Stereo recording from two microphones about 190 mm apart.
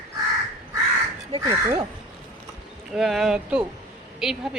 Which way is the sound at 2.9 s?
Centre (ahead or behind).